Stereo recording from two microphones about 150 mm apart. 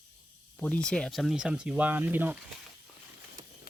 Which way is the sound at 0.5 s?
10° left (ahead or behind).